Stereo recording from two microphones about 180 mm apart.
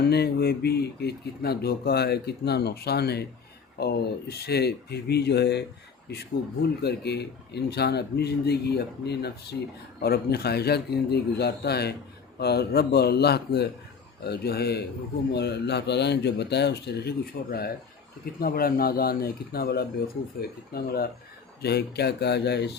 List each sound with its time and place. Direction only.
0.0 s speech: 65° left (ahead or behind)